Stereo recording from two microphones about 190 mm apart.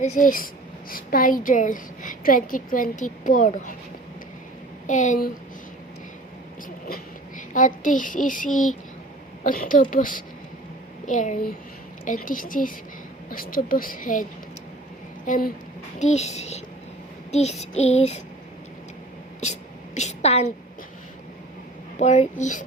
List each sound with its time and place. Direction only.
0.0 s a woman's voice: 45° left (ahead or behind)
4.9 s child singing: 40° left (ahead or behind)
6.8 s a woman's voice: 45° left (ahead or behind)
11.0 s child singing: 40° left (ahead or behind)
12.0 s a woman's voice: 45° left (ahead or behind)
16.0 s child singing: 35° left (ahead or behind)
19.4 s a sound: 35° left (ahead or behind)
21.9 s child singing: 35° left (ahead or behind)